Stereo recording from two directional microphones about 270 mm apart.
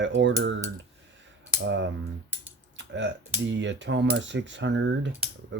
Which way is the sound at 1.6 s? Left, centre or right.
Right.